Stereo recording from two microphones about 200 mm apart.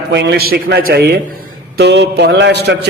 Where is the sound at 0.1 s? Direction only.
60° right (ahead or behind).